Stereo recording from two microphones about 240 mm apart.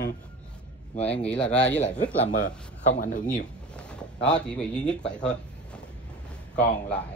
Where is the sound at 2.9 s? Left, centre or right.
Left.